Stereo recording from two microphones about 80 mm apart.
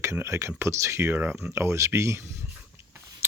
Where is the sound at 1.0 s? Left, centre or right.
Right.